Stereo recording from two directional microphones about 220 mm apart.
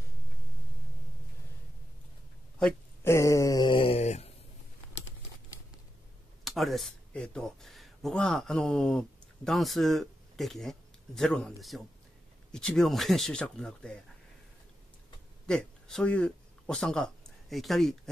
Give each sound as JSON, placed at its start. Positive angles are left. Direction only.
{"t": 2.6, "sound": "a sound", "side_deg": 10}
{"t": 6.4, "sound": "speech", "side_deg": 0}
{"t": 15.4, "sound": "speech", "side_deg": 5}